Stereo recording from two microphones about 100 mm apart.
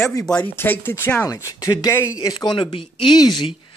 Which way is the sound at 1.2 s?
35° left (ahead or behind).